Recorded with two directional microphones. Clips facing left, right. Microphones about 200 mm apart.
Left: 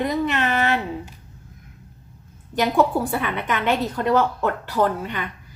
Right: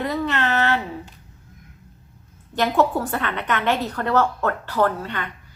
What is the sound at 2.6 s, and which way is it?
A woman's voice, 15° left (ahead or behind).